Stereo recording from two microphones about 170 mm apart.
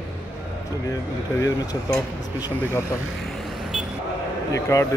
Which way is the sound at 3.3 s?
Centre (ahead or behind).